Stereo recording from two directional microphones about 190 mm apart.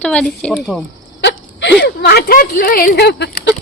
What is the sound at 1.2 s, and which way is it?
Speech, 65° left (ahead or behind).